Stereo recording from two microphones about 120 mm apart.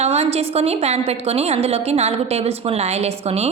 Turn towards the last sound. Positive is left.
turn(degrees=-55)  # may be behind; listen again after turning